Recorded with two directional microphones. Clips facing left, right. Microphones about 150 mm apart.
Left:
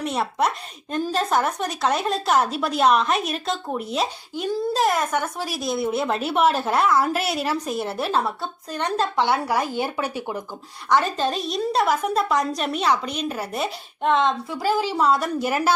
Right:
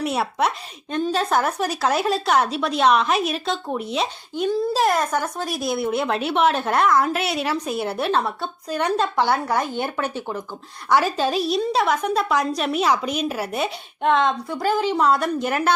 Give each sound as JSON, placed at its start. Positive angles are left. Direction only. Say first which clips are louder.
{"t": 0.0, "sound": "speech", "louder": "right 1 dB", "side_deg": -5}
{"t": 10.8, "sound": "speech", "louder": "right 1 dB", "side_deg": -5}